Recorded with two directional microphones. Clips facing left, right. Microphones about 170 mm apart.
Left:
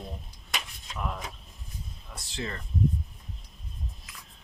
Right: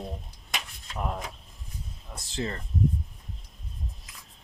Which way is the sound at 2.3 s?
30° right (ahead or behind).